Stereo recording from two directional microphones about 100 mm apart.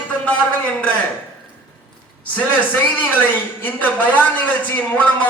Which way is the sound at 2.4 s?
15° left (ahead or behind).